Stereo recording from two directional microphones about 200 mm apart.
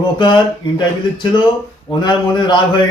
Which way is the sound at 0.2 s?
25° left (ahead or behind).